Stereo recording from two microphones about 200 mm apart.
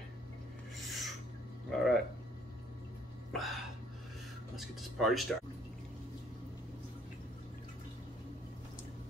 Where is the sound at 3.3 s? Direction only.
Centre (ahead or behind).